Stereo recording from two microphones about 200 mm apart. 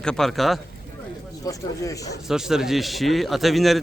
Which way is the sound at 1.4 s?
15° left (ahead or behind).